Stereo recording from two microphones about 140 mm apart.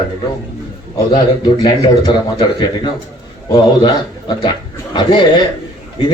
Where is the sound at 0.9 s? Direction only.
30° left (ahead or behind).